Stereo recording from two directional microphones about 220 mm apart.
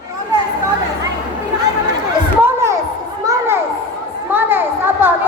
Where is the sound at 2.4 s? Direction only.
10° right (ahead or behind).